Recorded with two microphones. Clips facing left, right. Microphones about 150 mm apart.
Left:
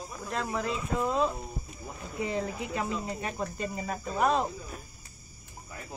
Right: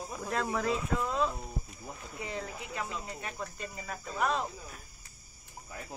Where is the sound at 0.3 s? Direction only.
Centre (ahead or behind).